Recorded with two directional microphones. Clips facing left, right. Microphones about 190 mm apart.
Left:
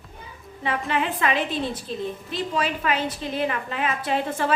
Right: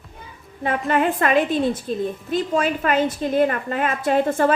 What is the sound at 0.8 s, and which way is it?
A woman's voice, 50° right (ahead or behind).